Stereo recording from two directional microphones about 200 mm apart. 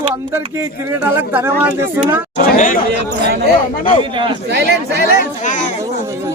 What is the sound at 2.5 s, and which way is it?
Speech, 40° left (ahead or behind).